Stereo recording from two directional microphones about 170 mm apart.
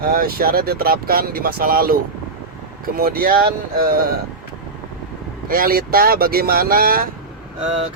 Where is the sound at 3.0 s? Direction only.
60° right (ahead or behind).